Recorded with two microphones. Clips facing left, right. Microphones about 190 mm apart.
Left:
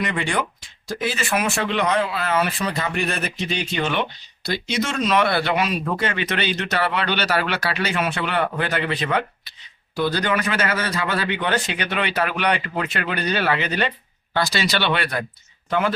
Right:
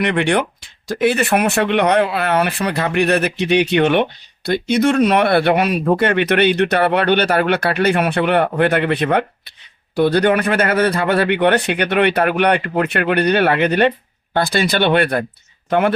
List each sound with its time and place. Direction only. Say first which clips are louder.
0.0 s speech: right 7 dB; 65° right (ahead or behind)